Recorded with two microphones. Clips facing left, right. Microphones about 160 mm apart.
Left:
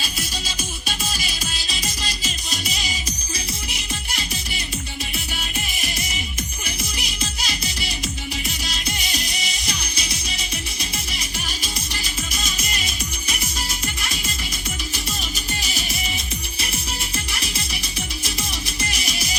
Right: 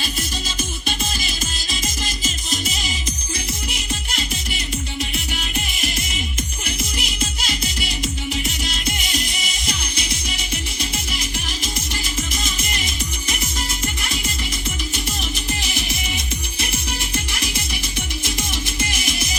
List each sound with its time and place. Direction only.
0.0 s music: 50° right (ahead or behind)
5.5 s music: 50° right (ahead or behind)
12.3 s music: 50° right (ahead or behind)
18.9 s music: 50° right (ahead or behind)